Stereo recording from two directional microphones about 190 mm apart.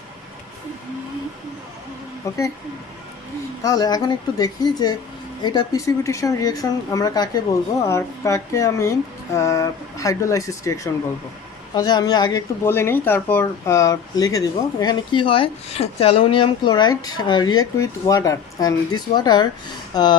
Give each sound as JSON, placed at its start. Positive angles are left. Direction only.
{"t": 2.3, "sound": "speech", "side_deg": 15}
{"t": 3.6, "sound": "speech", "side_deg": 20}